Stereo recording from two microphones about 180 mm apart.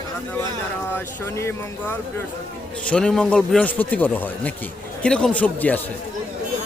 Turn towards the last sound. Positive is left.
turn(degrees=10)  # may be behind; listen again after turning